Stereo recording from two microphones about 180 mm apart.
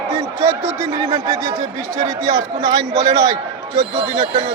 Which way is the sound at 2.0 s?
20° right (ahead or behind).